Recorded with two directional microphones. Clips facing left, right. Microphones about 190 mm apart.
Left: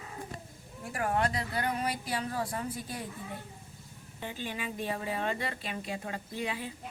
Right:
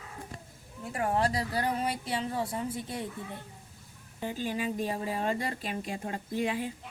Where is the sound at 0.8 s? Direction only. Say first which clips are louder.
Right 2 dB; 25° right (ahead or behind).